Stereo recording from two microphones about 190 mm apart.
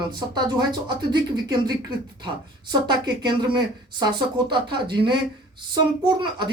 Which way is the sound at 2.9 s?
20° right (ahead or behind).